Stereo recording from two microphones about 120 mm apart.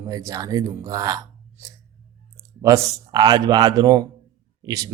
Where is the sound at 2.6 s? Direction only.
35° right (ahead or behind).